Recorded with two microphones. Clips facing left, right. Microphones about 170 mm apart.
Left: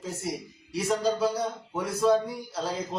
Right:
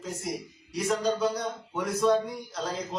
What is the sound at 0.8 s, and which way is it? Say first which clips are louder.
A man's voice: left 1 dB; centre (ahead or behind).